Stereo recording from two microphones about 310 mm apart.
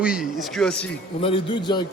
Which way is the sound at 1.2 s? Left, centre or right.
Centre.